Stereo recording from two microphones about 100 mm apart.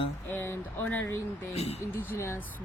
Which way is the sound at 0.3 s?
25° left (ahead or behind).